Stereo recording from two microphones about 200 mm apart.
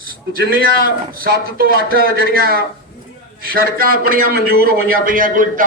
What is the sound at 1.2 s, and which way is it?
A man's voice, 50° right (ahead or behind).